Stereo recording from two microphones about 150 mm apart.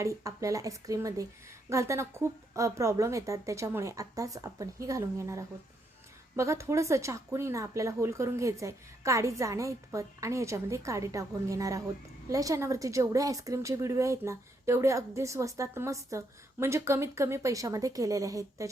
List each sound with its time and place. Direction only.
0.0 s speech: 20° right (ahead or behind)